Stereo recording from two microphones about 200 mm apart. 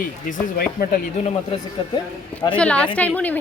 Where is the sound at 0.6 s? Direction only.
45° left (ahead or behind).